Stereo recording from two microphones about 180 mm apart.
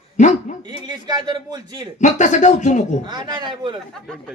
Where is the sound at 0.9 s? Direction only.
25° right (ahead or behind).